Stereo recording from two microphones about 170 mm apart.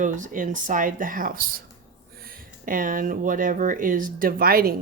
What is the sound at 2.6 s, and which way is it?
Speech, 55° right (ahead or behind).